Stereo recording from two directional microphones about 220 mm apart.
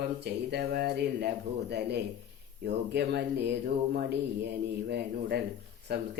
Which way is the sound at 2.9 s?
50° right (ahead or behind).